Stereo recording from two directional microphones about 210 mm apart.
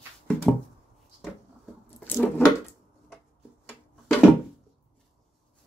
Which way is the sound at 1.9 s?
10° left (ahead or behind).